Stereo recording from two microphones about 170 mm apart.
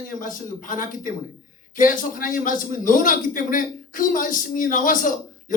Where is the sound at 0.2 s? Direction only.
50° left (ahead or behind).